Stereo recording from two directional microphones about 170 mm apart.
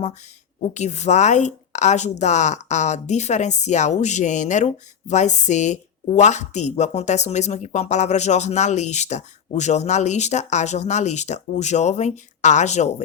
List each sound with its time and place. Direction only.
0.6 s a woman's voice: 40° left (ahead or behind)